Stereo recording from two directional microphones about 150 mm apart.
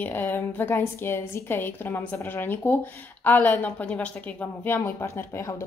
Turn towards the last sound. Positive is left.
turn(degrees=15)  # may be behind; listen again after turning